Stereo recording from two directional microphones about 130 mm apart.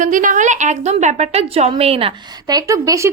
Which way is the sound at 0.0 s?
85° right.